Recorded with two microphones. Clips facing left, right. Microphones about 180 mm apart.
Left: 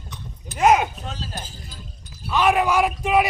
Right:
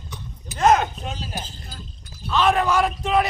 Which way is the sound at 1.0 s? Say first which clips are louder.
Right 2 dB; 15° right (ahead or behind).